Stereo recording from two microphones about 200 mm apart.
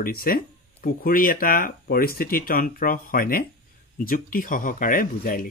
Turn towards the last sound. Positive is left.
turn(degrees=45)  # may be behind; listen again after turning